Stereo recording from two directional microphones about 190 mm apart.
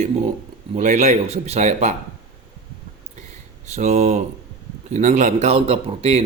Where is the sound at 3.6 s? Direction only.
35° right (ahead or behind).